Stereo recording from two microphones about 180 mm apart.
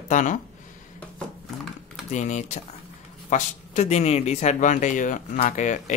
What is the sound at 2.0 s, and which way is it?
Speech, 40° left (ahead or behind).